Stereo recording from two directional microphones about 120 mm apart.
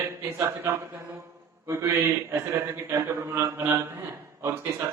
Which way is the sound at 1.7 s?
25° right (ahead or behind).